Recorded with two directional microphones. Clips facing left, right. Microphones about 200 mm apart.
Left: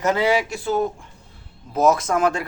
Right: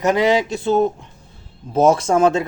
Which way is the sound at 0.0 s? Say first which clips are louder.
Right 3 dB; 15° right (ahead or behind).